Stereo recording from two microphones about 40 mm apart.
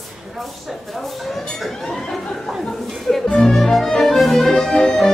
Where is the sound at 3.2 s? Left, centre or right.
Centre.